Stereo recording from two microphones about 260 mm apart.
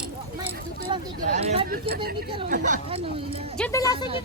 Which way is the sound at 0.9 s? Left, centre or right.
Right.